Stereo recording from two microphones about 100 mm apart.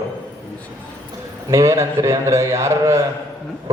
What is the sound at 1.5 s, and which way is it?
A man's voice, 30° right (ahead or behind).